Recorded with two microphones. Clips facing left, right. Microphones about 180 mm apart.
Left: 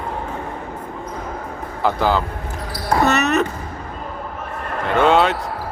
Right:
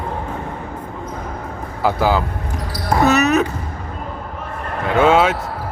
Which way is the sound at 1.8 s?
5° right (ahead or behind).